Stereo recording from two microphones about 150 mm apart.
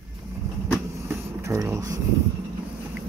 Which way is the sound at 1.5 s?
20° right (ahead or behind).